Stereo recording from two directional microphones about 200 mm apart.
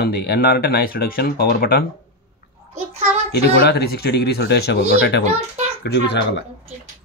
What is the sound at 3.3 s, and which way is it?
A child's voice, 50° left (ahead or behind).